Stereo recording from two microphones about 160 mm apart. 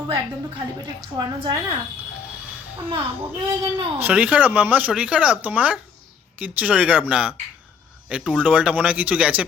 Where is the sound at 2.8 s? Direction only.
35° right (ahead or behind).